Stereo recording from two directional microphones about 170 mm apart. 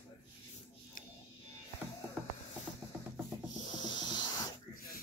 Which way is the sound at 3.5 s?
25° left (ahead or behind).